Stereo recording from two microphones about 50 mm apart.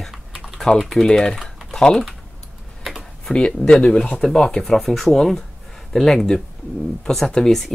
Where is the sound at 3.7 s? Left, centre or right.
Centre.